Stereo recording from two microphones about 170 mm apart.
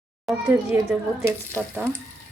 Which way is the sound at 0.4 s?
10° right (ahead or behind).